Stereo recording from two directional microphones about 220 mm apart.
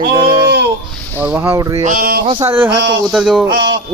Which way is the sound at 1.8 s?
40° right (ahead or behind).